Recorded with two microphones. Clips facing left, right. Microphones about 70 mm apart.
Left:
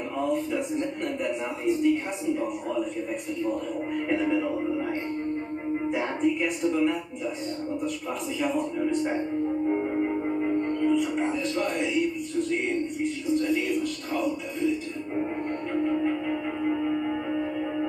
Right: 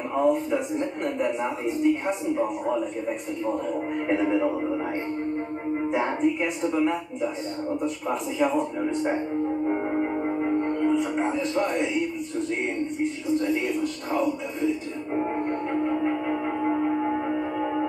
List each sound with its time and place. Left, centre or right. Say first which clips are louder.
0.2 s speech: right 4 dB; right
3.4 s speech: right 4 dB; right
5.9 s speech: right 2 dB; right
8.4 s speech: right 2 dB; right
9.7 s music: even; right
10.2 s speech: right 1 dB; right
15.1 s music: right 3 dB; right